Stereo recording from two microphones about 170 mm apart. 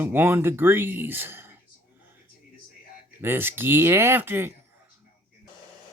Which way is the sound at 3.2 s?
15° right (ahead or behind).